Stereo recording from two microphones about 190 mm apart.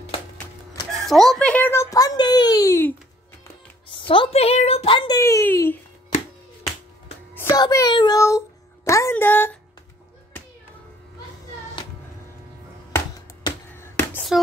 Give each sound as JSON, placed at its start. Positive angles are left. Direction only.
{"t": 0.9, "sound": "speech", "side_deg": 0}
{"t": 3.9, "sound": "a woman's voice", "side_deg": 25}
{"t": 5.2, "sound": "speech", "side_deg": 10}
{"t": 7.3, "sound": "a child's voice", "side_deg": 20}
{"t": 12.9, "sound": "a sound", "side_deg": 15}